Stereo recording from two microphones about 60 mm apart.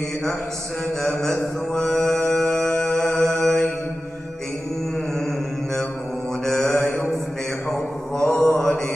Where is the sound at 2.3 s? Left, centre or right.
Centre.